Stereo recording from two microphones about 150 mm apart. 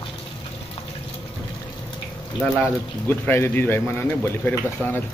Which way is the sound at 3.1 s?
15° left (ahead or behind).